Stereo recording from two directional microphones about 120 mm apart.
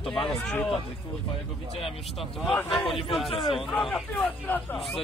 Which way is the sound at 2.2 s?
Centre (ahead or behind).